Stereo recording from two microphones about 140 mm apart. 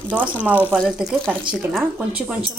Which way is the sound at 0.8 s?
Centre (ahead or behind).